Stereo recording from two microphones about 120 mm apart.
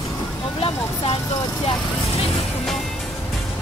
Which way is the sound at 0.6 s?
55° left (ahead or behind).